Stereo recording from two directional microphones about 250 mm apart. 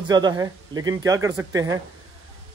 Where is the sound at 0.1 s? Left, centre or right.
Centre.